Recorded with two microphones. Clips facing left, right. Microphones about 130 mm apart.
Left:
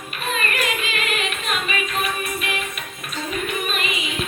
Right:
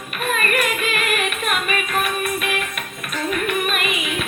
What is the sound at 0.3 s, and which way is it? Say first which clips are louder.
Music: right 3 dB; 55° right (ahead or behind).